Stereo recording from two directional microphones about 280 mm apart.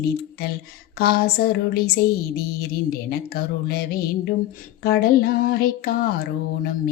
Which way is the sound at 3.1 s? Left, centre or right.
Left.